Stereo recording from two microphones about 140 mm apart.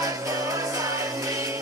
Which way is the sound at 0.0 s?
25° right (ahead or behind).